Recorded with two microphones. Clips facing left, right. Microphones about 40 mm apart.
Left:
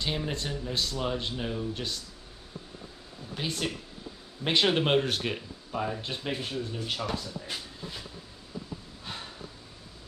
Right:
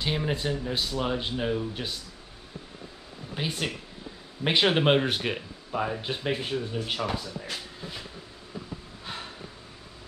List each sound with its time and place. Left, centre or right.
0.0 s speech: centre
3.3 s speech: centre
9.0 s snort: centre